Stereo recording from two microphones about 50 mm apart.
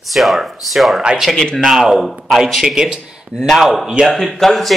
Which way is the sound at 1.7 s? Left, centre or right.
Centre.